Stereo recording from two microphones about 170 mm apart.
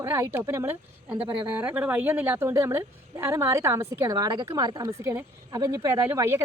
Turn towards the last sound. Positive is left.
turn(degrees=-15)  # may be behind; listen again after turning